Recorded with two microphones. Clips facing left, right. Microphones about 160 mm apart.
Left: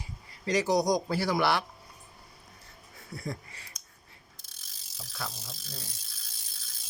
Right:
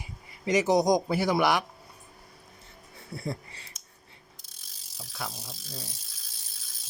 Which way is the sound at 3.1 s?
30° right (ahead or behind).